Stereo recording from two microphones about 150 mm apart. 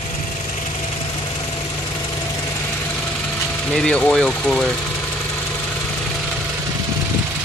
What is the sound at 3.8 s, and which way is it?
Speech, 5° left (ahead or behind).